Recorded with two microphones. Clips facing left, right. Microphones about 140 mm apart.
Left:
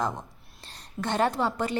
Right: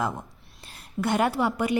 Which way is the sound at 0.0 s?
5° right (ahead or behind).